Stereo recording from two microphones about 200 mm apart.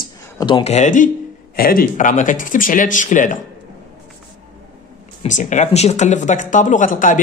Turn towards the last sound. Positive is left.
turn(degrees=40)  # may be behind; listen again after turning